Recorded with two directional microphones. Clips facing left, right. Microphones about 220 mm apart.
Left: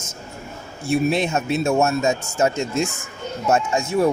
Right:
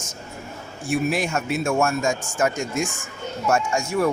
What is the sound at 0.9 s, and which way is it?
A man's voice, 25° left (ahead or behind).